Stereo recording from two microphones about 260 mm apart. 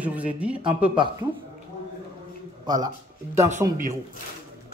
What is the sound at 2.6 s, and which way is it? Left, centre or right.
Speech, centre.